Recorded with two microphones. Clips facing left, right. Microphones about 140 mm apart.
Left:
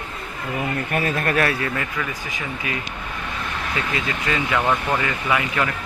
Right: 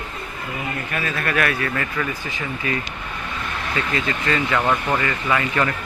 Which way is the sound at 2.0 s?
15° left (ahead or behind).